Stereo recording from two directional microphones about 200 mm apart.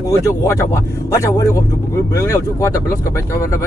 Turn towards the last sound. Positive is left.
turn(degrees=15)  # may be behind; listen again after turning